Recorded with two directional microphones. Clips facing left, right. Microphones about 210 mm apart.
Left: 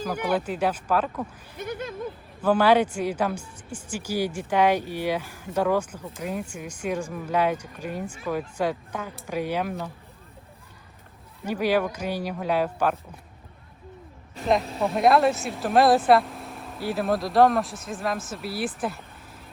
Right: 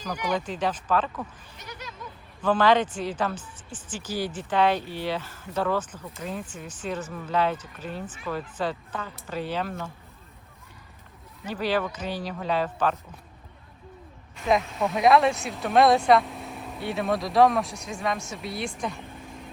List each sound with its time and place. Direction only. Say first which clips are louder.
0.0 s speech: left 3 dB; 5° left (ahead or behind)
1.5 s a sound: left 10 dB; 55° left (ahead or behind)
2.4 s speech: left 2 dB; 10° left (ahead or behind)
11.4 s speech: left 3 dB; 10° left (ahead or behind)
14.6 s speech: left 1 dB; 30° left (ahead or behind)
14.9 s speech: even; centre (ahead or behind)
18.8 s vehicle: left 2 dB; 5° left (ahead or behind)